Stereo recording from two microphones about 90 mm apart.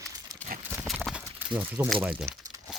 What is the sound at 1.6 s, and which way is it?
Speech, 25° right (ahead or behind).